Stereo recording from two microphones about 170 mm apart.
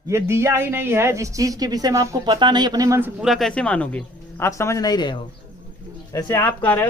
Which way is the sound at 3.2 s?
Centre (ahead or behind).